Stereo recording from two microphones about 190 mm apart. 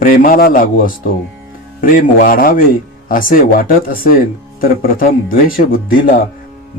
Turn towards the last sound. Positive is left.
turn(degrees=50)  # may be behind; listen again after turning